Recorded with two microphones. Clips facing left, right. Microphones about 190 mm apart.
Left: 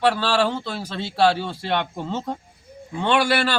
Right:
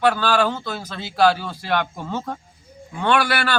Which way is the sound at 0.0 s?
30° left (ahead or behind).